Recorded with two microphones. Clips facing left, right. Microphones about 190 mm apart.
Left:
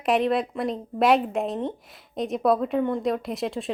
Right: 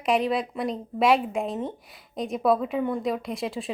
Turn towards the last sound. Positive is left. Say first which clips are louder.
# left 2 dB
turn(degrees=0)  # may be behind; listen again after turning